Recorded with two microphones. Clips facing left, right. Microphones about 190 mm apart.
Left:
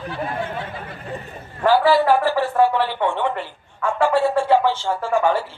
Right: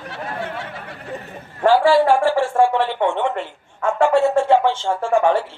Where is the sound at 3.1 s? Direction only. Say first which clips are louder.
Right 2 dB; 25° right (ahead or behind).